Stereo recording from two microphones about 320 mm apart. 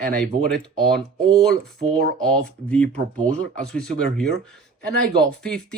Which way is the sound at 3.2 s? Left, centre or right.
Centre.